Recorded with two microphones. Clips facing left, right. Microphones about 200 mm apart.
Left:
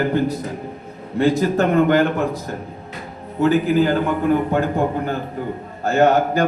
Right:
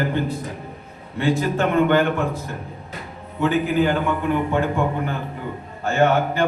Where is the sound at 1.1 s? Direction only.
40° left (ahead or behind).